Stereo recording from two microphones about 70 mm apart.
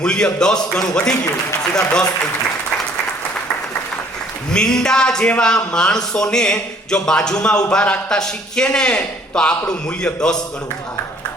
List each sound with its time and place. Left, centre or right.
0.0 s speech: centre
4.5 s speech: centre